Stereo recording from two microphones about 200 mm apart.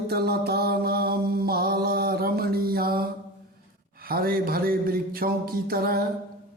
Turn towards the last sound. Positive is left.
turn(degrees=-50)  # may be behind; listen again after turning